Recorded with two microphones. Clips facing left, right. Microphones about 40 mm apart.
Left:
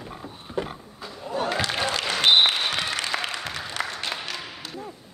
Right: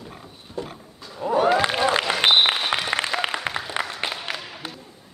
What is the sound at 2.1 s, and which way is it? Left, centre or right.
Applause, right.